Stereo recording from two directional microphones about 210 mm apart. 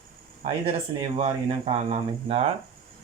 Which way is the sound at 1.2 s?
30° right (ahead or behind).